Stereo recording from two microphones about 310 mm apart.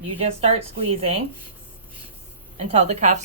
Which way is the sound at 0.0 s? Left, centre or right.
Centre.